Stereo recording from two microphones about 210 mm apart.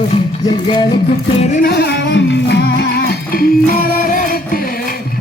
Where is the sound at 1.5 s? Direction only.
50° left (ahead or behind).